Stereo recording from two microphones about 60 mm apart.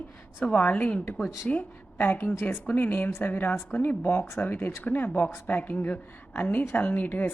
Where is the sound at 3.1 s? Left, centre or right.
Left.